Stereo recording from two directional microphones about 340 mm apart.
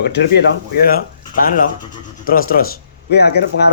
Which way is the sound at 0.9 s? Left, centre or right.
Left.